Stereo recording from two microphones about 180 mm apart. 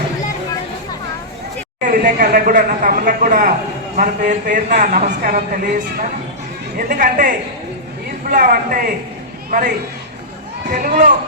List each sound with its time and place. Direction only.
1.9 s a man's voice: 50° right (ahead or behind)